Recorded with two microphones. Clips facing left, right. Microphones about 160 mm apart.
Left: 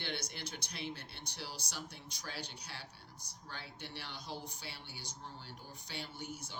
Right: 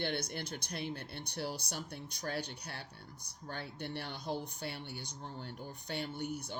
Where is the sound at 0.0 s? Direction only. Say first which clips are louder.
Right 6 dB; 55° right (ahead or behind).